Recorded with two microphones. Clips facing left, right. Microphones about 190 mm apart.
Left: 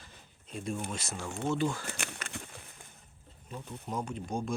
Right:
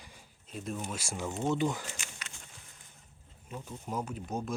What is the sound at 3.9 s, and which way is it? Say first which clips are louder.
Speech: left 1 dB; 5° right (ahead or behind).